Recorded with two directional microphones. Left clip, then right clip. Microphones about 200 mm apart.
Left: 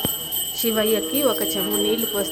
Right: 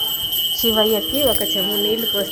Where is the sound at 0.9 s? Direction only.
5° left (ahead or behind).